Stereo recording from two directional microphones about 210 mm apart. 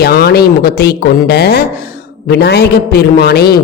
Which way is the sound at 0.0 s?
50° left (ahead or behind).